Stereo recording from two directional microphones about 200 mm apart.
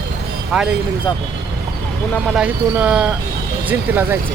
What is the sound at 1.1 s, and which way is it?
Speech, 10° left (ahead or behind).